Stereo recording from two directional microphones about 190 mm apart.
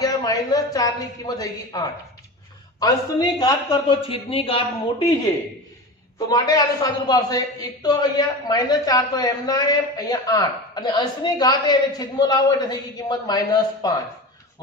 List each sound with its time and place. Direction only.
0.0 s a man's voice: 20° left (ahead or behind)
6.1 s a man's voice: 20° left (ahead or behind)